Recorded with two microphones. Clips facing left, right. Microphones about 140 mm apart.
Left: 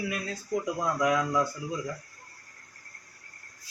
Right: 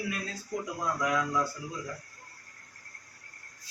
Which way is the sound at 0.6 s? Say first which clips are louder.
Left 4 dB; 20° left (ahead or behind).